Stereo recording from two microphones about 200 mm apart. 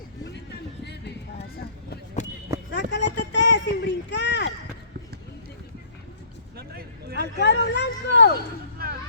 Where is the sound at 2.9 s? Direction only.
65° left (ahead or behind).